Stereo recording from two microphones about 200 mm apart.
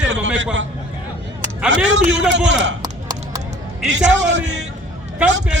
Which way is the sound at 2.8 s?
20° right (ahead or behind).